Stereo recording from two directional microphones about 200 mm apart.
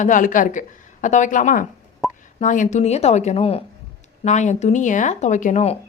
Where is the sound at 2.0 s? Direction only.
Centre (ahead or behind).